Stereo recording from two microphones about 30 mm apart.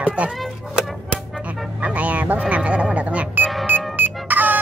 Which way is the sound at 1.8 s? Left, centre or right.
Right.